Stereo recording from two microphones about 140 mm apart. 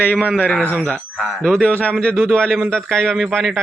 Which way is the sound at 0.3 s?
10° left (ahead or behind).